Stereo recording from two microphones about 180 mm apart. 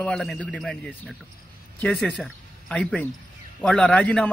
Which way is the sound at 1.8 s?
5° left (ahead or behind).